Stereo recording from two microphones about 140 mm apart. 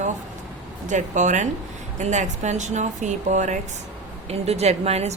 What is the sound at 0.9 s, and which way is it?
Speech, 60° right (ahead or behind).